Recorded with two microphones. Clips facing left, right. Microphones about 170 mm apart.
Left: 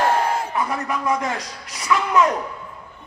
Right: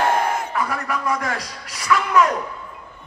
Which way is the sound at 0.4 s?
25° left (ahead or behind).